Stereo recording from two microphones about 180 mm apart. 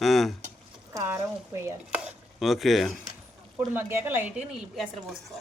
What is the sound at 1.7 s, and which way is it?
Stir, 5° right (ahead or behind).